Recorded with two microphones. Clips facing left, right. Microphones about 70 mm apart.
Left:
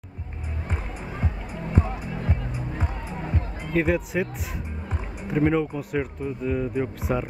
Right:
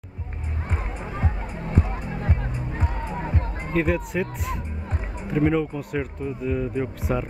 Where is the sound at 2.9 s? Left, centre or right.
Right.